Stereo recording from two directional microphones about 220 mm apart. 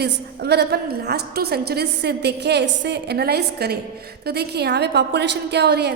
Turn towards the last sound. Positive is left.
turn(degrees=-50)  # may be behind; listen again after turning